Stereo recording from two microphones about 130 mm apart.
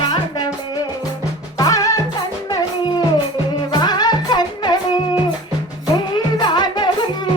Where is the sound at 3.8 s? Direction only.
30° left (ahead or behind).